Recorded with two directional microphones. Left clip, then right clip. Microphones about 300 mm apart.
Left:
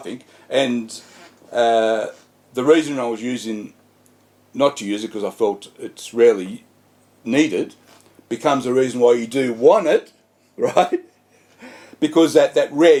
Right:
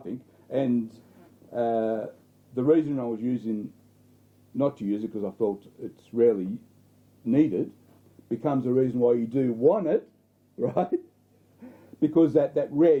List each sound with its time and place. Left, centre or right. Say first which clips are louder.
0.0 s a man's voice: left 6 dB; centre